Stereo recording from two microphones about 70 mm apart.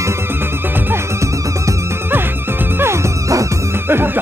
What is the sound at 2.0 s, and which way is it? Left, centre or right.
Music, right.